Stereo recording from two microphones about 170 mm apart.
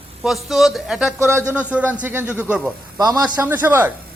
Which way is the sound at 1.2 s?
15° right (ahead or behind).